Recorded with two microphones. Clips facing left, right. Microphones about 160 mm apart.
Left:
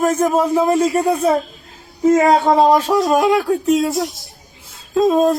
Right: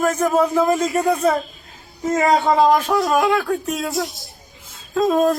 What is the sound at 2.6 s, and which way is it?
Speech, 30° left (ahead or behind).